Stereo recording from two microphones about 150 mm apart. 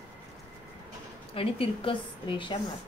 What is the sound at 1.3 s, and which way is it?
A woman's voice, 40° left (ahead or behind).